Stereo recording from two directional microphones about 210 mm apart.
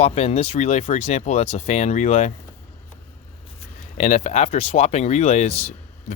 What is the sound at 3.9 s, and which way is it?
Speech, 35° left (ahead or behind).